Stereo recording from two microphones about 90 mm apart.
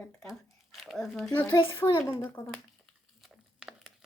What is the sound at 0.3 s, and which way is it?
Crumpling, centre (ahead or behind).